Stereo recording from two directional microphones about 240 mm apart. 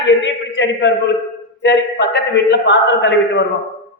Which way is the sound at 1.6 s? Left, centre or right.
Left.